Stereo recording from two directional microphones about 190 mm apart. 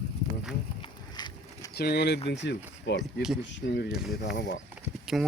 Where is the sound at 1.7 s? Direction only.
55° left (ahead or behind).